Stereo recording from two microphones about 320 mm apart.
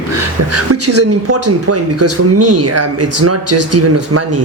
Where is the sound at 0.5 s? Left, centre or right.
Right.